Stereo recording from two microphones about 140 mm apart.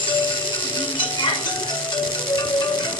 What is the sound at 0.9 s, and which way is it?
Music, 35° left (ahead or behind).